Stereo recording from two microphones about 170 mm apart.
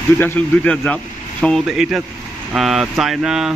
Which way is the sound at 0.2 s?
5° left (ahead or behind).